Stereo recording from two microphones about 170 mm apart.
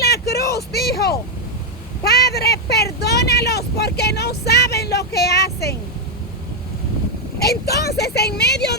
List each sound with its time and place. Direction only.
0.0 s a sound: 65° left (ahead or behind)
2.3 s speech: 70° left (ahead or behind)
7.3 s speech: 70° left (ahead or behind)